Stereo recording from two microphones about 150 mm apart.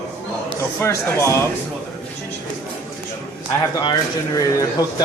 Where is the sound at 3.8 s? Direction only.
25° left (ahead or behind).